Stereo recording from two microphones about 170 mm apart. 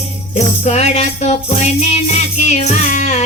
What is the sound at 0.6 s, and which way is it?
Music, 40° left (ahead or behind).